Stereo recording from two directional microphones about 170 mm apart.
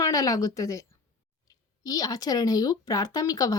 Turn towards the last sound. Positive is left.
turn(degrees=20)  # may be behind; listen again after turning